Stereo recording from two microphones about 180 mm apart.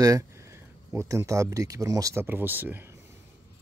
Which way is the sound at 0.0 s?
15° right (ahead or behind).